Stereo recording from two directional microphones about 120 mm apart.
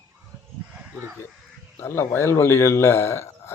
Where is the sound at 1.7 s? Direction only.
20° left (ahead or behind).